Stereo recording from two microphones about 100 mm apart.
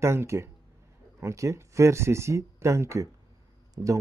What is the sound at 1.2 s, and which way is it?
Speech, 30° right (ahead or behind).